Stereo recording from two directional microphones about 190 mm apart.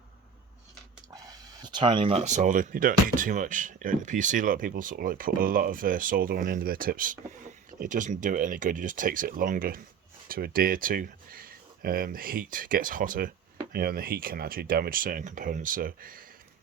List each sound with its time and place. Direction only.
1.1 s speech: 20° right (ahead or behind); by 16.2 s 50° right (ahead or behind)